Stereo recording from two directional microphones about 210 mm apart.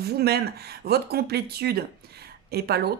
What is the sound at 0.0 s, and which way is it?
A woman's voice, 50° right (ahead or behind).